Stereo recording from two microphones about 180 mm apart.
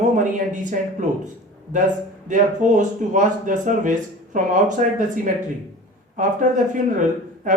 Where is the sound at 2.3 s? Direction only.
45° right (ahead or behind).